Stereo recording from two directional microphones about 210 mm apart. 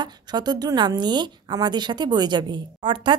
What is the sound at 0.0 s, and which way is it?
A woman's voice, 20° right (ahead or behind).